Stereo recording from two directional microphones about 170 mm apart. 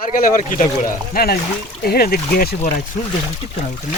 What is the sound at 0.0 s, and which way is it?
Speech, 55° left (ahead or behind).